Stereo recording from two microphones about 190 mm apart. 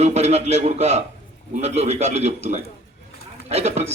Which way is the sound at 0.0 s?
35° right (ahead or behind).